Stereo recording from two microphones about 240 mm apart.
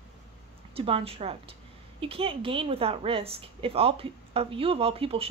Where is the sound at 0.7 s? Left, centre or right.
Right.